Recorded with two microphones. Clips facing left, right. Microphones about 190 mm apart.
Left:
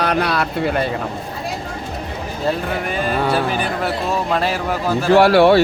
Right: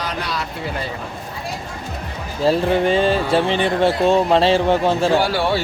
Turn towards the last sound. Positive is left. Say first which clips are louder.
# left 7 dB
turn(degrees=65)  # may be behind; listen again after turning